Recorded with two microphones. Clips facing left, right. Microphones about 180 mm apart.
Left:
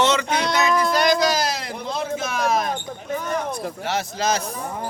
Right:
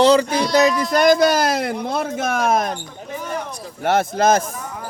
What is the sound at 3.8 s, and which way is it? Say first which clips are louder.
Speech: right 10 dB; 55° right (ahead or behind).